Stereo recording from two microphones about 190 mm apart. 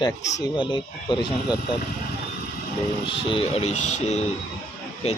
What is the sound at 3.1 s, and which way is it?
Speech, 30° left (ahead or behind).